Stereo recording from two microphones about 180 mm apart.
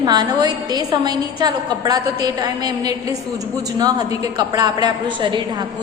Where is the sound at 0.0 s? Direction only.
20° right (ahead or behind).